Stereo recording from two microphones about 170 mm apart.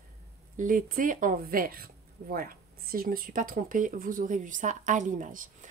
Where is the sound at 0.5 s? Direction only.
50° right (ahead or behind).